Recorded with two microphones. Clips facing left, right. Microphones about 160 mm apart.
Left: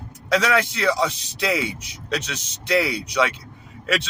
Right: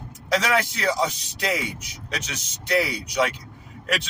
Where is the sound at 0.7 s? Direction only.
70° left (ahead or behind).